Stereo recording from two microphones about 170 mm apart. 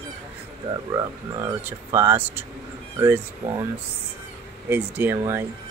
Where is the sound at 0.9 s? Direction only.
20° right (ahead or behind).